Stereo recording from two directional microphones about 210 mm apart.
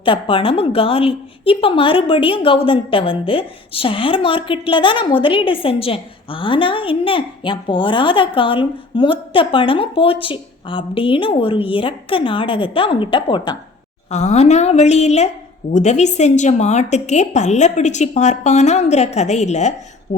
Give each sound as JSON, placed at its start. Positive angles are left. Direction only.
{"t": 0.0, "sound": "a woman's voice", "side_deg": 25}
{"t": 14.1, "sound": "a woman's voice", "side_deg": 35}